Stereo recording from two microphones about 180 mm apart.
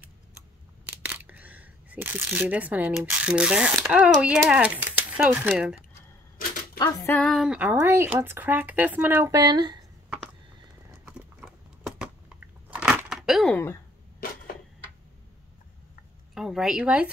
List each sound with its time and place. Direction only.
0.8 s speech: 10° right (ahead or behind)
6.3 s typewriter: 50° left (ahead or behind)
6.8 s a sound: 15° left (ahead or behind)
7.2 s speech: centre (ahead or behind); by 9.8 s 25° right (ahead or behind)
11.1 s a sound: 5° right (ahead or behind)
16.3 s speech: centre (ahead or behind)